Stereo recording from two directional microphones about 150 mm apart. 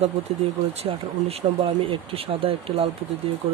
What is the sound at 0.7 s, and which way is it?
Speech, 40° right (ahead or behind).